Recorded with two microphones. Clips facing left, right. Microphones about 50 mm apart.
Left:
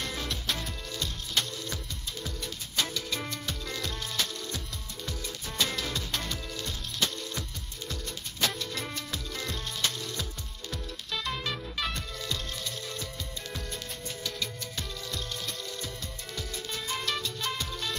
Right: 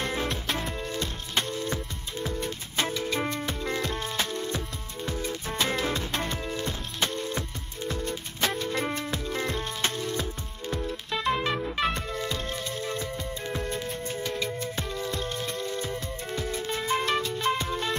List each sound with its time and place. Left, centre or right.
0.0 s music: right